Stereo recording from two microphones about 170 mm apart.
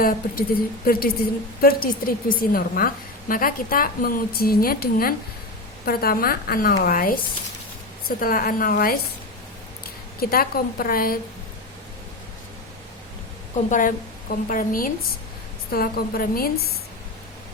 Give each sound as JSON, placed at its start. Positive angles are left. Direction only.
{"t": 0.0, "sound": "a woman's voice", "side_deg": 55}
{"t": 10.2, "sound": "a woman's voice", "side_deg": 60}
{"t": 13.7, "sound": "a woman's voice", "side_deg": 50}